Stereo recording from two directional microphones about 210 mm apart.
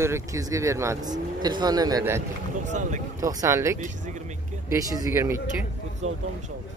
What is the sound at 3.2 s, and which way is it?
Speech, 15° right (ahead or behind).